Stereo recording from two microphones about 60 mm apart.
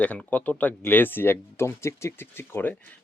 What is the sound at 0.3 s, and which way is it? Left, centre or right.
Speech, left.